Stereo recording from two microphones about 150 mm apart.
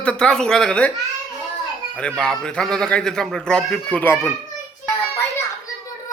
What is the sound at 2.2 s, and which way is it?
Speech, 5° left (ahead or behind).